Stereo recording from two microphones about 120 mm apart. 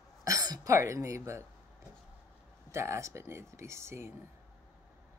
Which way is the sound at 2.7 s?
25° right (ahead or behind).